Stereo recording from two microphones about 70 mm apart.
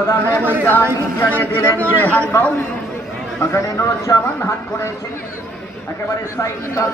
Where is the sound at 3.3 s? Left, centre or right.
Left.